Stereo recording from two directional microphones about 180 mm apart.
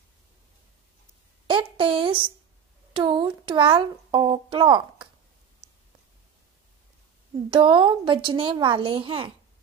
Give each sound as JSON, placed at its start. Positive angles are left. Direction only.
{"t": 1.5, "sound": "a woman's voice", "side_deg": -30}
{"t": 7.5, "sound": "speech", "side_deg": -30}